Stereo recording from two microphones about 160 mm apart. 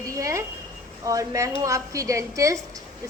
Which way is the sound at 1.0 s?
20° right (ahead or behind).